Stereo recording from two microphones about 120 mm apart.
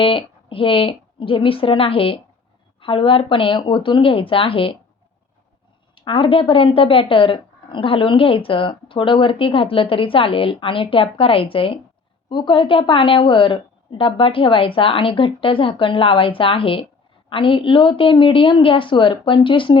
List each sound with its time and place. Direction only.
0.0 s speech: 50° left (ahead or behind)
5.9 s speech: 45° left (ahead or behind)